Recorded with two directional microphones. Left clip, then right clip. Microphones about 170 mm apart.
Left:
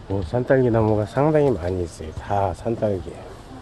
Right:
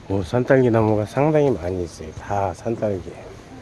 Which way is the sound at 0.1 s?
25° right (ahead or behind).